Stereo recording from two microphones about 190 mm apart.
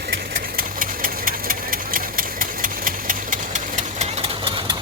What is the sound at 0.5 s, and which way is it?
Engine, 45° right (ahead or behind).